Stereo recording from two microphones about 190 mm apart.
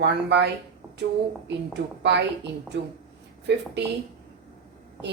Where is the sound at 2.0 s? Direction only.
65° right (ahead or behind).